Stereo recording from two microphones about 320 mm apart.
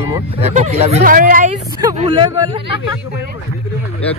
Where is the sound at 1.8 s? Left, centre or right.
Centre.